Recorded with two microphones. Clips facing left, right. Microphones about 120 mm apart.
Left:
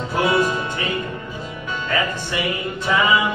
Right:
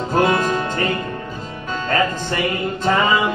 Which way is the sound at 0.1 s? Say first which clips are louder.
Right 2 dB; 45° right (ahead or behind).